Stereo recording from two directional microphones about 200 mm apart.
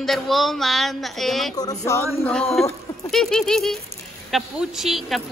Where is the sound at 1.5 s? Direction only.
20° left (ahead or behind).